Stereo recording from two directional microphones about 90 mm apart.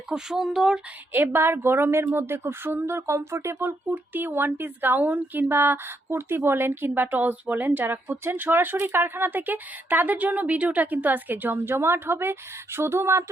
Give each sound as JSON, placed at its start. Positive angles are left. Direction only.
{"t": 0.1, "sound": "speech", "side_deg": -5}
{"t": 1.1, "sound": "speech", "side_deg": -25}